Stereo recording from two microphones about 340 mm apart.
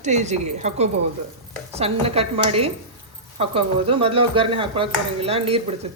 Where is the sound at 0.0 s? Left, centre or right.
Centre.